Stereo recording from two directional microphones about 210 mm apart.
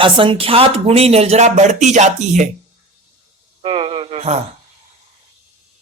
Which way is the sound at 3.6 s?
25° right (ahead or behind).